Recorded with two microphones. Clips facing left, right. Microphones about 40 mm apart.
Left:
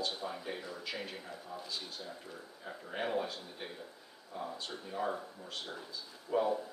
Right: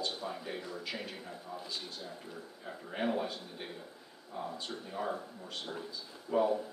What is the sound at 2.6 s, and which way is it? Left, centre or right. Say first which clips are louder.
Speech: right 3 dB; centre.